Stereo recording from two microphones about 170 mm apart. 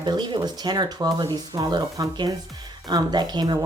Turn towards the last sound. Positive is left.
turn(degrees=-25)  # may be behind; listen again after turning